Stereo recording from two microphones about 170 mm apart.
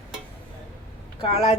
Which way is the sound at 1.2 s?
40° left (ahead or behind).